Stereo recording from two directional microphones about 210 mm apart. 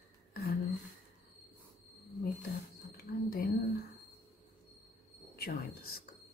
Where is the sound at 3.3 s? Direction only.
45° left (ahead or behind).